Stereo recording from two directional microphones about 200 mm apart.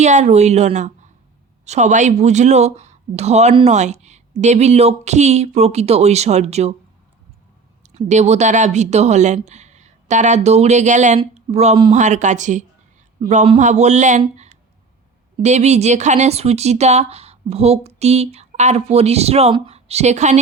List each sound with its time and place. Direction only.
0.0 s speech: 35° right (ahead or behind)
7.9 s speech: 35° right (ahead or behind)